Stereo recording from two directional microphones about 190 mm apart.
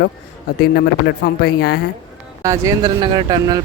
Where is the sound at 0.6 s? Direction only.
55° left (ahead or behind).